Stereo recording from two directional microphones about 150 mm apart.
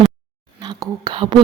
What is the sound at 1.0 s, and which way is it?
Speech, 30° right (ahead or behind).